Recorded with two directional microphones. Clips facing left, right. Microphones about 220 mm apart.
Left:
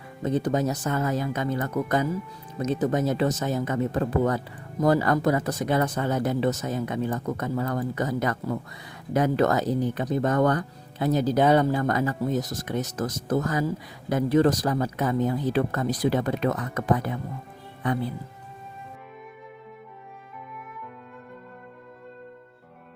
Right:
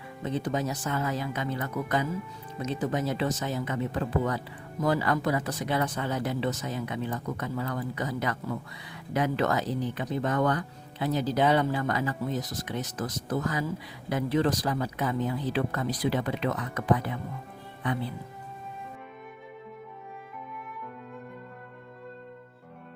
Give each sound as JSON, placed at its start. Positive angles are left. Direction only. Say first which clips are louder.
{"t": 0.2, "sound": "speech", "louder": "left 5 dB", "side_deg": 45}